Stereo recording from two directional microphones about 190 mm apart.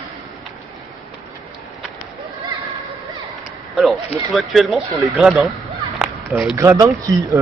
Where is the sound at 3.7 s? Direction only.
Centre (ahead or behind).